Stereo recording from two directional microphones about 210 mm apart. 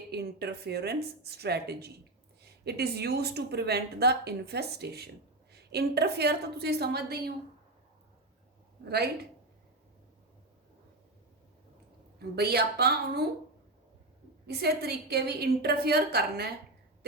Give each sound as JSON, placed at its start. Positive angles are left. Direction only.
{"t": 0.1, "sound": "speech", "side_deg": -50}
{"t": 12.4, "sound": "speech", "side_deg": -50}
{"t": 14.4, "sound": "speech", "side_deg": -50}